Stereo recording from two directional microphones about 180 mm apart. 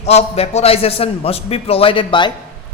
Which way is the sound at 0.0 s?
35° left (ahead or behind).